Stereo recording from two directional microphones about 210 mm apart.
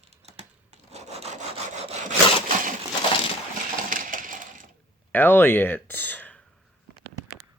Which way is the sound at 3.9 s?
40° right (ahead or behind).